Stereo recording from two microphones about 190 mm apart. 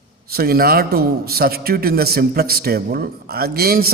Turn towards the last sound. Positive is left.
turn(degrees=-55)  # may be behind; listen again after turning